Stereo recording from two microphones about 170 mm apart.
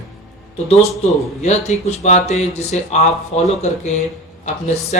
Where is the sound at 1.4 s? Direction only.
40° left (ahead or behind).